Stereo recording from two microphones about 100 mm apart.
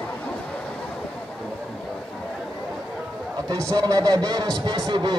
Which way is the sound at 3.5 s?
35° right (ahead or behind).